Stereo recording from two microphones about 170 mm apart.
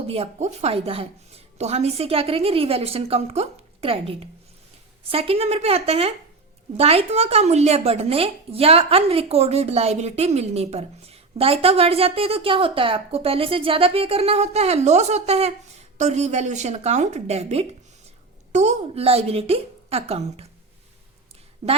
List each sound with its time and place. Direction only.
0.1 s speech: 40° right (ahead or behind)
21.6 s speech: 40° right (ahead or behind)